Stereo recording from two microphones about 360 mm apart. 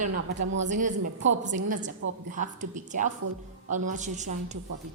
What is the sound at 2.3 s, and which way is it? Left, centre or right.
A woman's voice, right.